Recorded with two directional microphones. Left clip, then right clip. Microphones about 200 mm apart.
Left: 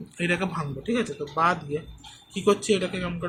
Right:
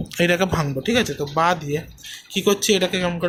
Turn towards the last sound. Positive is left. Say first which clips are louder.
# right 9 dB
turn(degrees=-55)  # may be behind; listen again after turning